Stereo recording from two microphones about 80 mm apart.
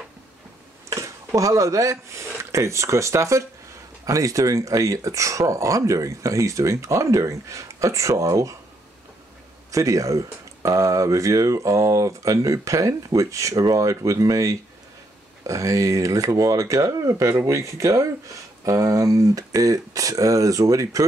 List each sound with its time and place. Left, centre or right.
0.8 s speech: right
9.7 s speech: right